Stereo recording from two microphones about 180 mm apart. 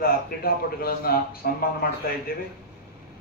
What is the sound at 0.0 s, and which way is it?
A man's voice, 55° left (ahead or behind).